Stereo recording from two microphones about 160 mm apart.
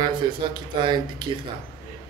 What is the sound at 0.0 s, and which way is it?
Speech, 30° right (ahead or behind).